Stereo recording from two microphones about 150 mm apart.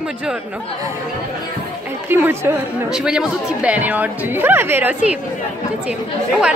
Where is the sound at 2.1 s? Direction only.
15° right (ahead or behind).